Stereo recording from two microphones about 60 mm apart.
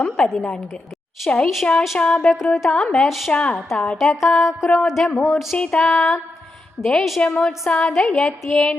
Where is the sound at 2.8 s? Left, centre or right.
Centre.